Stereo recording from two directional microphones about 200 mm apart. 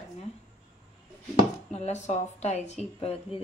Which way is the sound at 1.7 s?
35° left (ahead or behind).